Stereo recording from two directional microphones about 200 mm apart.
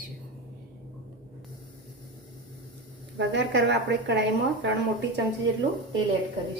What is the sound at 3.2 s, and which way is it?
A woman's voice, 60° right (ahead or behind).